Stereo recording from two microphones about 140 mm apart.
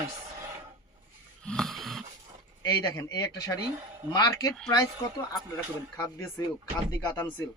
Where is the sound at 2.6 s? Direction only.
25° left (ahead or behind).